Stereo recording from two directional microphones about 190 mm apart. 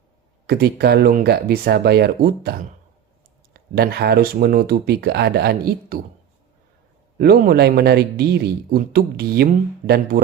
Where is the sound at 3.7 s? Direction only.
55° right (ahead or behind).